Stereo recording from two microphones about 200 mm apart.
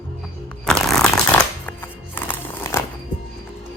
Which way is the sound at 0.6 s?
Centre (ahead or behind).